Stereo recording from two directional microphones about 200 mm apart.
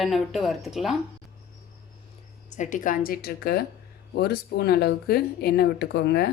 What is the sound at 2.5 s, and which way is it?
A woman's voice, 40° left (ahead or behind).